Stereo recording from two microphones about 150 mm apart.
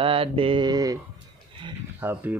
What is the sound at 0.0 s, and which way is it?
Mantra, 40° right (ahead or behind).